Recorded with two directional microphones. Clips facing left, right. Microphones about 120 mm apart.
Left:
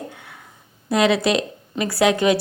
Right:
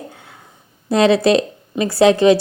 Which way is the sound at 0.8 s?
30° right (ahead or behind).